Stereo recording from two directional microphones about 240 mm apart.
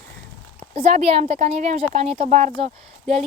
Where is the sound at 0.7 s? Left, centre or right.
Right.